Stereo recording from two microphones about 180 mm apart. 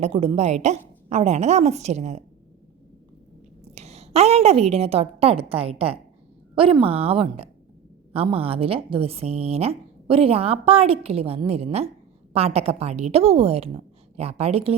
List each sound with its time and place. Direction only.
0.0 s a woman's voice: 35° right (ahead or behind)
3.8 s a woman's voice: 35° right (ahead or behind)